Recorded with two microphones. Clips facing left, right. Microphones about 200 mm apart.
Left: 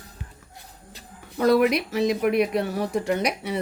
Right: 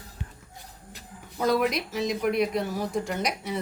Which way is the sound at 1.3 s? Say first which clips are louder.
Left 5 dB; 65° left (ahead or behind).